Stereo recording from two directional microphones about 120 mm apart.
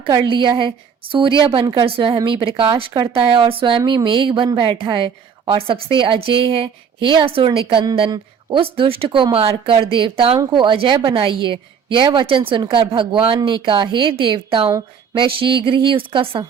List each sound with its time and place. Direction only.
0.0 s speech: 45° right (ahead or behind)